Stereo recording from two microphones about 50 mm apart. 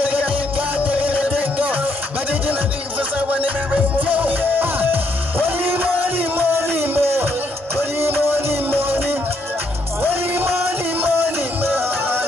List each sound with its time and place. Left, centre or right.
0.0 s music: right
3.3 s music: right
11.0 s music: right